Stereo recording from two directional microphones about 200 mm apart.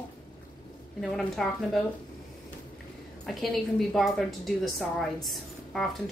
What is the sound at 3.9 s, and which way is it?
A woman's voice, centre (ahead or behind).